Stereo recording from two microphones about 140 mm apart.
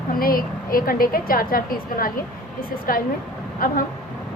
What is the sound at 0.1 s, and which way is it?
A woman's voice, 90° left.